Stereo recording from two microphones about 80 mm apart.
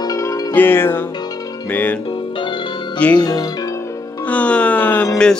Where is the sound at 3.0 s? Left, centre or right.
Centre.